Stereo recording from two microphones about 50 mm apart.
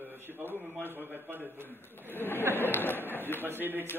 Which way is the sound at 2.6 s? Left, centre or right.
Left.